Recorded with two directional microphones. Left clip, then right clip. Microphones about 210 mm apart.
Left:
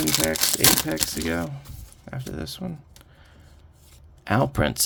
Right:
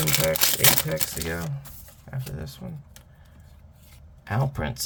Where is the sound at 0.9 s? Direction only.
50° left (ahead or behind).